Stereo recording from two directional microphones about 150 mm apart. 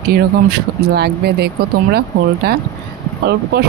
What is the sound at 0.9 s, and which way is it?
Speech, 90° right.